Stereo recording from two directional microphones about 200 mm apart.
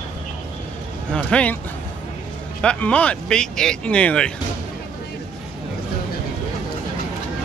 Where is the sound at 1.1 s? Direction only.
5° left (ahead or behind).